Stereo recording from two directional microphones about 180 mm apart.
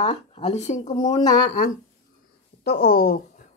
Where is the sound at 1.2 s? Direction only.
50° left (ahead or behind).